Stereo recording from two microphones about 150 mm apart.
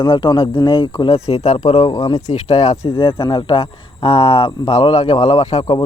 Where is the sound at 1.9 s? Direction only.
25° left (ahead or behind).